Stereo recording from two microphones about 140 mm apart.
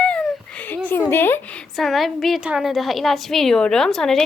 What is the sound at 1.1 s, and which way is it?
A woman's voice, 15° left (ahead or behind).